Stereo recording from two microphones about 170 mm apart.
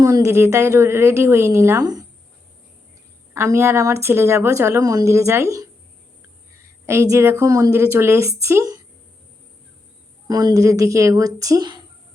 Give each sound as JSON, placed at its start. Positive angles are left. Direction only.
{"t": 0.0, "sound": "a woman's voice", "side_deg": -20}
{"t": 3.3, "sound": "a woman's voice", "side_deg": -15}
{"t": 6.8, "sound": "a woman's voice", "side_deg": -15}
{"t": 10.2, "sound": "speech", "side_deg": -20}